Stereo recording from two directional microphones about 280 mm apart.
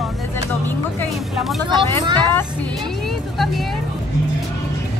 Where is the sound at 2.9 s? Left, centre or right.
Centre.